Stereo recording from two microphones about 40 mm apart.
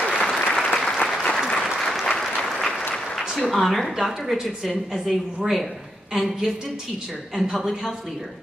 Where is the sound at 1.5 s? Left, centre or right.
Left.